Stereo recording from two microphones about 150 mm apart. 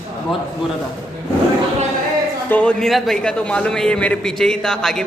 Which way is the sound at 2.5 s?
5° left (ahead or behind).